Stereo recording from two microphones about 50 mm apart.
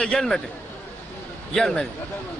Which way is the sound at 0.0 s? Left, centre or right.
Centre.